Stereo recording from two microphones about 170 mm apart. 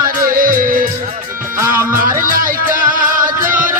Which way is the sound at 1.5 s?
15° right (ahead or behind).